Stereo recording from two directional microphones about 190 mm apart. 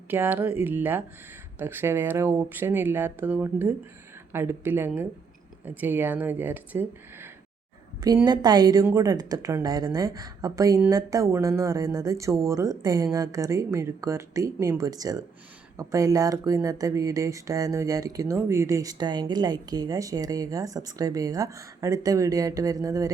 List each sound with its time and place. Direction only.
0.1 s speech: 10° right (ahead or behind)